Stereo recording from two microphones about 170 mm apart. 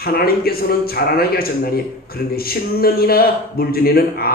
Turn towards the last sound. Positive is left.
turn(degrees=60)  # may be behind; listen again after turning